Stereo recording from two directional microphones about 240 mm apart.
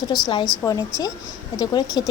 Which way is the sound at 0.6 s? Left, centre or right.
Centre.